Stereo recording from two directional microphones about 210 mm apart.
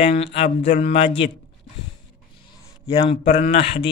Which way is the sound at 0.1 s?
30° left (ahead or behind).